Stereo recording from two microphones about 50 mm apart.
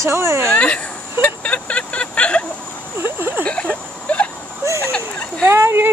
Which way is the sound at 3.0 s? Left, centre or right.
Right.